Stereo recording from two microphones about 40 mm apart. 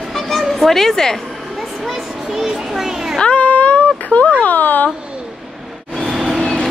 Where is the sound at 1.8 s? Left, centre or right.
Centre.